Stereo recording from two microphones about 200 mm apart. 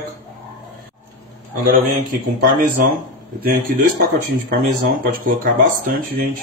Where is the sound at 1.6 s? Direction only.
50° right (ahead or behind).